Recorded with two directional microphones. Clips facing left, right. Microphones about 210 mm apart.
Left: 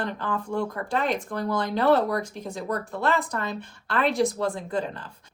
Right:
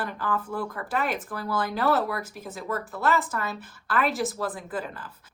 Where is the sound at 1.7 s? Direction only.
25° left (ahead or behind).